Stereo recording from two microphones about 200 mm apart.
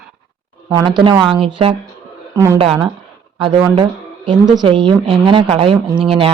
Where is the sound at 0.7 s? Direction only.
25° right (ahead or behind).